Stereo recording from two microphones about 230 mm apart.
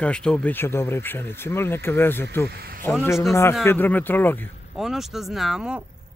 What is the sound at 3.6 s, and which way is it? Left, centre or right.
Speech, centre.